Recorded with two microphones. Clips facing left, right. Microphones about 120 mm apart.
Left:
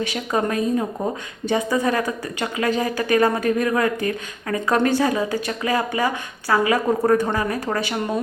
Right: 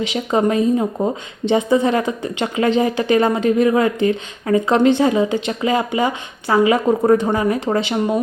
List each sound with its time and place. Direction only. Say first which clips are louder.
0.0 s a woman's voice: right 5 dB; 20° right (ahead or behind)